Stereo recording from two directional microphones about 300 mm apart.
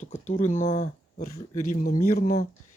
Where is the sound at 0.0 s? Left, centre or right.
Left.